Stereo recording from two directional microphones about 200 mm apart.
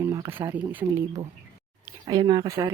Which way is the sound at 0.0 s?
15° right (ahead or behind).